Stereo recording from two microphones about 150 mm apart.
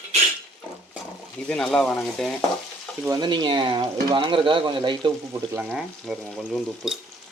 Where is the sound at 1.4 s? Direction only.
5° left (ahead or behind).